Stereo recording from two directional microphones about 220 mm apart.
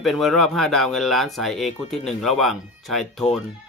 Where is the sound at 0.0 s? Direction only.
Centre (ahead or behind).